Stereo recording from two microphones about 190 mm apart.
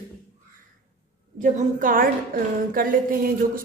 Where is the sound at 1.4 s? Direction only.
45° right (ahead or behind).